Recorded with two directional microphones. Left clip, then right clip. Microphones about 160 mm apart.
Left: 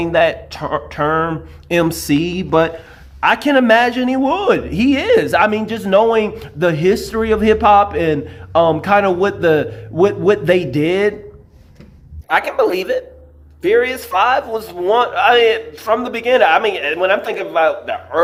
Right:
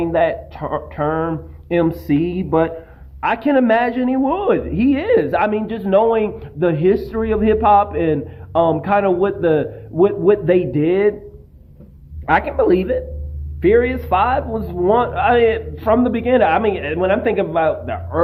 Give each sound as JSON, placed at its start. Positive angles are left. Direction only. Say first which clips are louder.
{"t": 0.0, "sound": "speech", "louder": "left 3 dB", "side_deg": 25}
{"t": 12.3, "sound": "speech", "louder": "even", "side_deg": 30}